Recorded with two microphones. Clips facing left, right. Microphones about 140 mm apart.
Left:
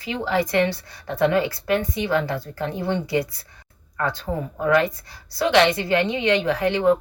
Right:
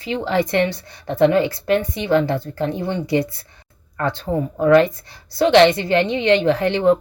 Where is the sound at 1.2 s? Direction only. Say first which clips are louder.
Right 5 dB; 25° right (ahead or behind).